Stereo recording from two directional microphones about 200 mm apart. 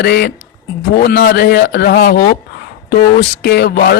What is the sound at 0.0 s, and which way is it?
Speech, 55° left (ahead or behind).